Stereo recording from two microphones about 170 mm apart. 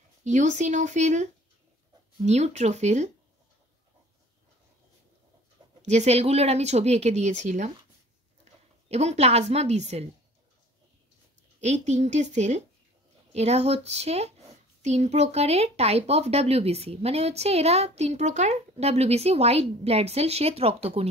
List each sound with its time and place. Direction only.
0.2 s speech: 45° right (ahead or behind)
5.9 s speech: 40° right (ahead or behind)
8.8 s speech: 40° right (ahead or behind)
11.6 s speech: 40° right (ahead or behind)